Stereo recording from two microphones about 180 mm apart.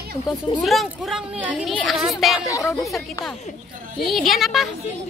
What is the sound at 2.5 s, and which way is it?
Speech, 20° left (ahead or behind).